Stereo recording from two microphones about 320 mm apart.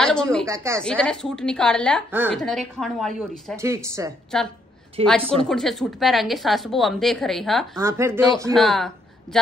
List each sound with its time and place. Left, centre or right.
0.0 s a woman's voice: centre
0.5 s a woman's voice: centre
0.8 s a woman's voice: centre
4.3 s a woman's voice: centre
5.0 s a woman's voice: centre
5.4 s a woman's voice: centre